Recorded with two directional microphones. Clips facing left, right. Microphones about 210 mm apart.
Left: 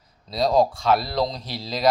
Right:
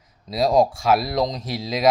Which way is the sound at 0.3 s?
5° right (ahead or behind).